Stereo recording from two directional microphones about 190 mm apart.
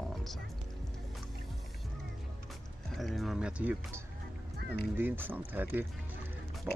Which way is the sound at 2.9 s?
Centre (ahead or behind).